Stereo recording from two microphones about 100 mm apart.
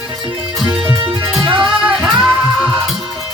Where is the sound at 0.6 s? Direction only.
50° right (ahead or behind).